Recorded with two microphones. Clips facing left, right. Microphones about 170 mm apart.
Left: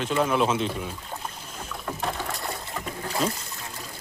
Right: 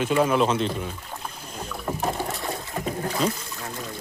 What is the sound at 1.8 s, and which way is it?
Rowboat, 25° right (ahead or behind).